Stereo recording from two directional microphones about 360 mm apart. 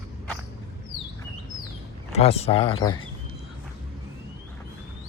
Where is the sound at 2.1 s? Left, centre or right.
Centre.